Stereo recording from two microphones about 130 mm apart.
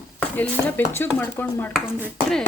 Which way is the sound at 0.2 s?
10° left (ahead or behind).